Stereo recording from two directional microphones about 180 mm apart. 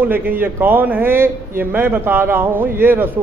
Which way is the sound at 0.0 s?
10° right (ahead or behind).